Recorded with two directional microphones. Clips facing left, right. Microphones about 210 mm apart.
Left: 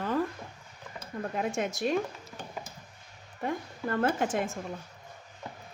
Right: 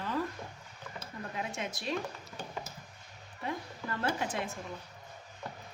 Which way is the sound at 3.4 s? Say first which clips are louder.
Left 5 dB; 50° left (ahead or behind).